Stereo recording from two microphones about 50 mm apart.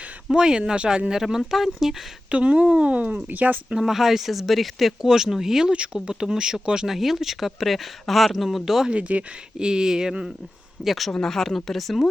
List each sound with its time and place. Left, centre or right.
0.3 s speech: centre
2.3 s speech: right
3.7 s speech: centre
5.7 s speech: centre
8.9 s speech: right
9.6 s speech: centre
10.8 s speech: centre